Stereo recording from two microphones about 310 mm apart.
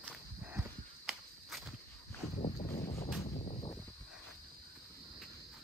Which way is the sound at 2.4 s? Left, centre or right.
Left.